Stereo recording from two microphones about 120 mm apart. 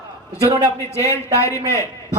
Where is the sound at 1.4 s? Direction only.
25° left (ahead or behind).